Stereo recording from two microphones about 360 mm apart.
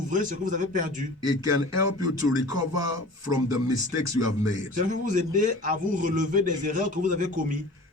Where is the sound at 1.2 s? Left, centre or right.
Left.